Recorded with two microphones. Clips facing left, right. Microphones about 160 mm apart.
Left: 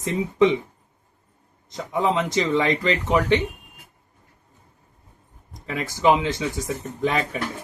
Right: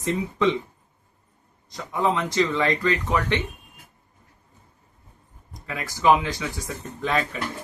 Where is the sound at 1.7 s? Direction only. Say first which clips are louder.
Left 2 dB; 20° left (ahead or behind).